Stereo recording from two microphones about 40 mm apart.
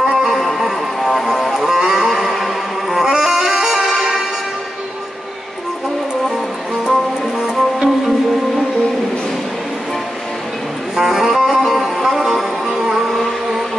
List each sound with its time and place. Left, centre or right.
0.0 s music: centre
0.3 s music: centre
7.3 s music: centre
11.0 s music: centre